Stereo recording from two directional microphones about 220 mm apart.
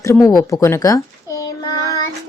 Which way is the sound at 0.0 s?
15° left (ahead or behind).